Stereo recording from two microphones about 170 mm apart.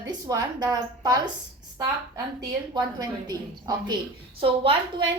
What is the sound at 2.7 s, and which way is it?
A woman's voice, 25° right (ahead or behind).